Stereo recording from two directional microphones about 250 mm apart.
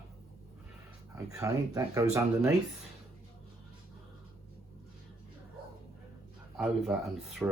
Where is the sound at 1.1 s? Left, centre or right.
Centre.